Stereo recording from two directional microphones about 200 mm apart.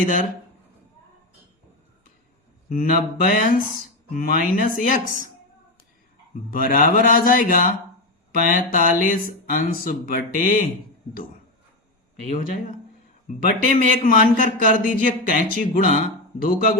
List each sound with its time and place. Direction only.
0.0 s mantra: 40° left (ahead or behind)
2.6 s mantra: 40° left (ahead or behind)
4.1 s speech: 45° left (ahead or behind)
6.5 s speech: 45° left (ahead or behind)
13.2 s speech: 45° left (ahead or behind)